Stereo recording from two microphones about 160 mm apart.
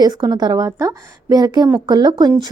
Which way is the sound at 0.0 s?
25° right (ahead or behind).